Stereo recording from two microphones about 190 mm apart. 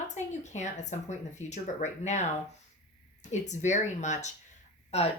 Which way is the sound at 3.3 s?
40° left (ahead or behind).